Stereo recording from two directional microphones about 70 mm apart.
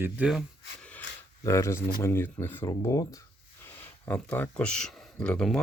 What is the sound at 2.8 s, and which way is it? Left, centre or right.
Speech, left.